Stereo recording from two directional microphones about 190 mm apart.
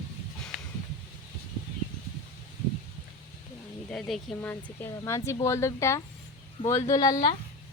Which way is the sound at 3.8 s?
Centre (ahead or behind).